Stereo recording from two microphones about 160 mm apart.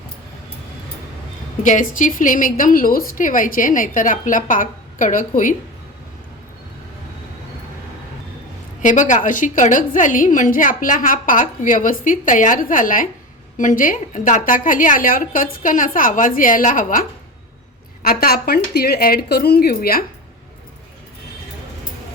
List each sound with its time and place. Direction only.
1.6 s a woman's voice: 55° left (ahead or behind)
8.8 s a woman's voice: 50° left (ahead or behind)
18.0 s speech: 70° left (ahead or behind)